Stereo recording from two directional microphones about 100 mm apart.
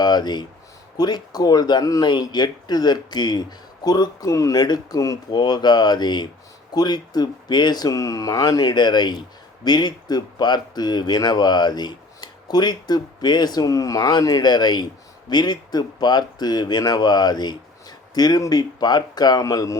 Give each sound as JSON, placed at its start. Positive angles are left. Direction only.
{"t": 0.0, "sound": "speech", "side_deg": 45}
{"t": 5.4, "sound": "speech", "side_deg": 45}